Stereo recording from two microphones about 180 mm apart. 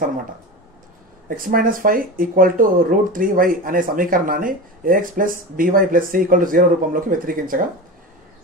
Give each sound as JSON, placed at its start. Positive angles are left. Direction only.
{"t": 1.3, "sound": "speech", "side_deg": -50}